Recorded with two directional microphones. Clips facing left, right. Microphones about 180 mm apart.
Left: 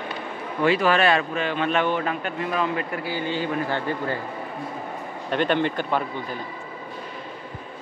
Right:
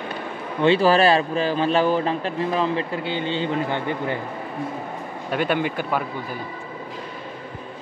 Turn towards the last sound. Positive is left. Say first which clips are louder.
# even
turn(degrees=-10)  # may be behind; listen again after turning